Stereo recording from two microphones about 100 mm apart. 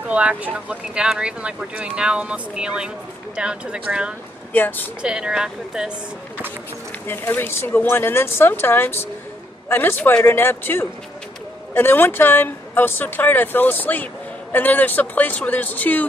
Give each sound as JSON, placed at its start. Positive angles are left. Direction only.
{"t": 0.1, "sound": "speech", "side_deg": -15}
{"t": 4.5, "sound": "speech", "side_deg": 20}
{"t": 5.0, "sound": "speech", "side_deg": -5}
{"t": 7.1, "sound": "speech", "side_deg": 25}